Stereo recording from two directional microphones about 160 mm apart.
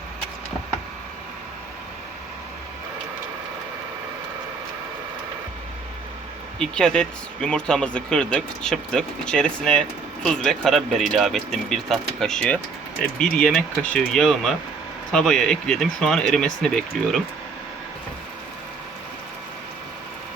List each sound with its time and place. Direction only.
6.6 s speech: 5° left (ahead or behind)